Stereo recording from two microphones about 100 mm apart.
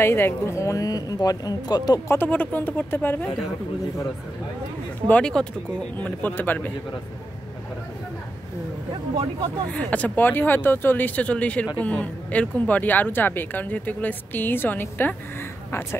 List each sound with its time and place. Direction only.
0.0 s speech: 25° left (ahead or behind); by 2.0 s 40° left (ahead or behind)
2.0 s a woman's voice: 20° left (ahead or behind)
5.0 s a woman's voice: 10° left (ahead or behind)
9.7 s a woman's voice: 15° left (ahead or behind)